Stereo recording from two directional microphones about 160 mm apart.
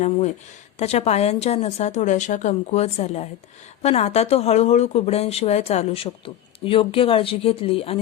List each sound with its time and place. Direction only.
0.8 s a woman's voice: 40° left (ahead or behind)